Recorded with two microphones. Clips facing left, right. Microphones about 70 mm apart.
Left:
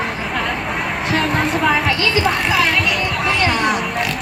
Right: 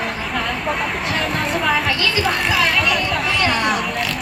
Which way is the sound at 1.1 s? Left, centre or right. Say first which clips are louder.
Left 6 dB; centre.